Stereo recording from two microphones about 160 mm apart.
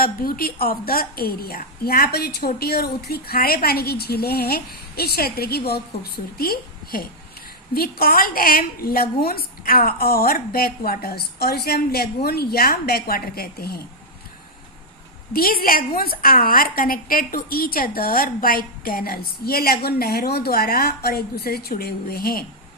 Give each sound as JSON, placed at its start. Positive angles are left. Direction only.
{"t": 0.0, "sound": "a woman's voice", "side_deg": 65}
{"t": 15.3, "sound": "a woman's voice", "side_deg": 70}